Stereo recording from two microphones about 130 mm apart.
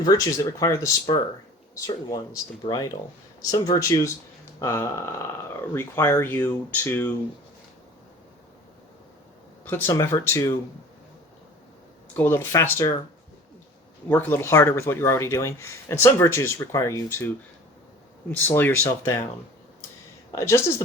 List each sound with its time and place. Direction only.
0.0 s speech: 25° left (ahead or behind)
2.0 s speech: 25° left (ahead or behind)
9.6 s speech: 20° left (ahead or behind)
12.1 s speech: 15° left (ahead or behind)
14.1 s speech: 15° left (ahead or behind)
20.3 s speech: 20° left (ahead or behind)